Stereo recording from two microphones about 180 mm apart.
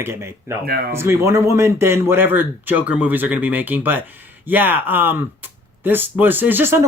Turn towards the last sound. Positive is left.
turn(degrees=-10)  # may be behind; listen again after turning